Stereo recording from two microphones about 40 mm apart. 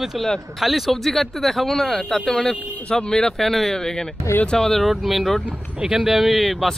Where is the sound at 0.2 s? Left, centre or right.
Centre.